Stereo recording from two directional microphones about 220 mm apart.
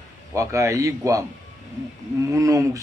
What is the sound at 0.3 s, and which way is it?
Speech, 15° right (ahead or behind).